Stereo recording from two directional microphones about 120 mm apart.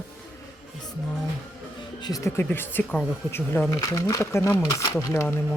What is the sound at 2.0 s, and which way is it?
Speech, 30° left (ahead or behind).